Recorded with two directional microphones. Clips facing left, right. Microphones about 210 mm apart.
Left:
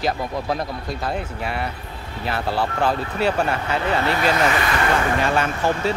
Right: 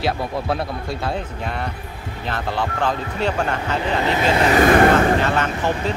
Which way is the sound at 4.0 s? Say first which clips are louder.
Right 4 dB; 20° right (ahead or behind).